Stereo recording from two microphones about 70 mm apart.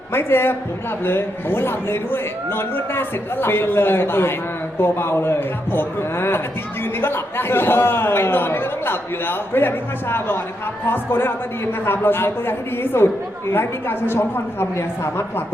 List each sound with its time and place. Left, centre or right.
0.1 s a man's voice: left